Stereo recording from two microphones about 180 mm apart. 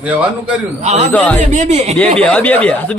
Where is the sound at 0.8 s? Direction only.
35° right (ahead or behind).